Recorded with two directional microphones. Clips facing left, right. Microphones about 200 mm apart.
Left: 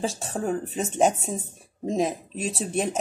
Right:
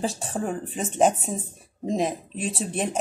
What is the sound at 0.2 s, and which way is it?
Speech, centre (ahead or behind).